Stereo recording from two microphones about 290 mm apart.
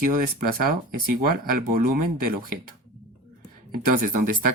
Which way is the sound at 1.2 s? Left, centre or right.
Right.